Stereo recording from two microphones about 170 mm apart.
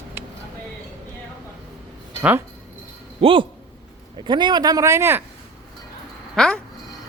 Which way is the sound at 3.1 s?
30° right (ahead or behind).